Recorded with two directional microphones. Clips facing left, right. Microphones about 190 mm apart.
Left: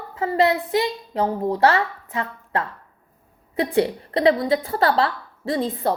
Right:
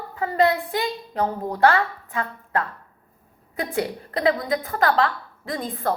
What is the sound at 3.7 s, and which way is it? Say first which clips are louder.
A woman's voice: left 5 dB; 30° left (ahead or behind).